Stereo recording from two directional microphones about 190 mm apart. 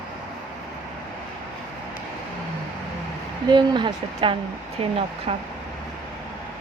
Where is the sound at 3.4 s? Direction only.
25° right (ahead or behind).